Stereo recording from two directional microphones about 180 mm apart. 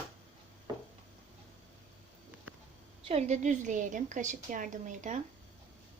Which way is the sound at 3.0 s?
40° right (ahead or behind).